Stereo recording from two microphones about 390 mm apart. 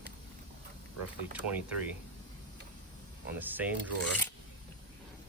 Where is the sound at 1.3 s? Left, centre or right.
Centre.